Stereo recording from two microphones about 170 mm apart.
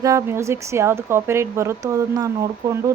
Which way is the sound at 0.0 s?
15° right (ahead or behind).